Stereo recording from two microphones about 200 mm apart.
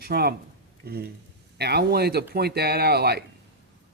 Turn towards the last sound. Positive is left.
turn(degrees=-55)  # may be behind; listen again after turning